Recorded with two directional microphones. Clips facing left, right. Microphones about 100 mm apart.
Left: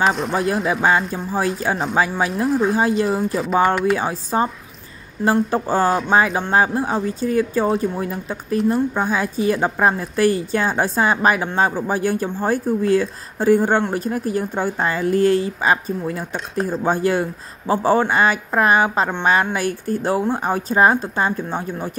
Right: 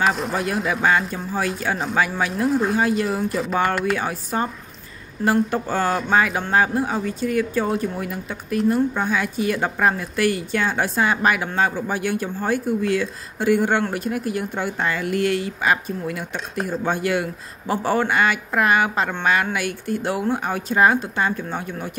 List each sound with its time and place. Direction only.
0.0 s speech: centre (ahead or behind)
0.8 s speech: 35° left (ahead or behind)
2.3 s speech: centre (ahead or behind)
3.9 s speech: 30° left (ahead or behind)